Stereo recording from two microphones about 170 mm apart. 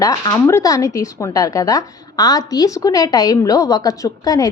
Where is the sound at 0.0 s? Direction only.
20° left (ahead or behind).